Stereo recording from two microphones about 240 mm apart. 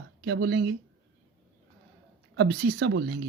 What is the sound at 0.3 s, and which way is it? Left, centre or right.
Speech, right.